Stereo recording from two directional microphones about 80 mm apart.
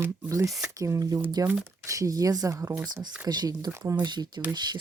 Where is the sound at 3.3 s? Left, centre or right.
Right.